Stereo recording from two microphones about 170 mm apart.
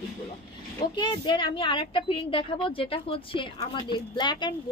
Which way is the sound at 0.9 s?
25° left (ahead or behind).